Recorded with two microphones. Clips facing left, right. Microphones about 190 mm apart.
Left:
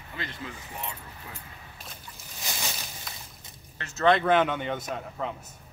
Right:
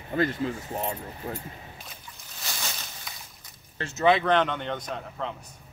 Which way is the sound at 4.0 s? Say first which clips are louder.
Even; centre (ahead or behind).